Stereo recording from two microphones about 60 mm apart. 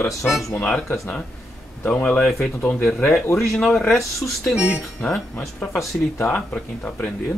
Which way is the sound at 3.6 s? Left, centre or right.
Centre.